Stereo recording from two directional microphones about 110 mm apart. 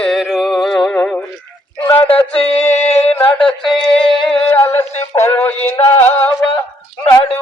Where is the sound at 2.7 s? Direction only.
75° left (ahead or behind).